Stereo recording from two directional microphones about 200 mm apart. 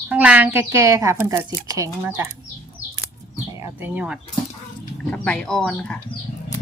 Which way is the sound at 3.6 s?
10° right (ahead or behind).